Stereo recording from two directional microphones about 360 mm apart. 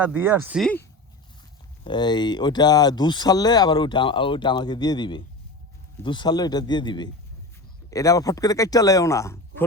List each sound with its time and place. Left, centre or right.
0.0 s speech: centre